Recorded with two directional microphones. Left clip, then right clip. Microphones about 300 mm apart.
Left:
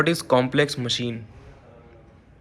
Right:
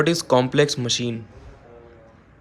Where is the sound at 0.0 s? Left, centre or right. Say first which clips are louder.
Right 1 dB; centre.